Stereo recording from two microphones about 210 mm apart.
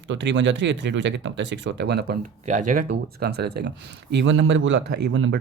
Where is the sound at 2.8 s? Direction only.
50° right (ahead or behind).